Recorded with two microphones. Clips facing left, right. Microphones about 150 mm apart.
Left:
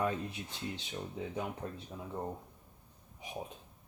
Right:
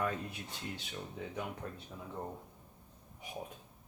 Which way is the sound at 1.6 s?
25° left (ahead or behind).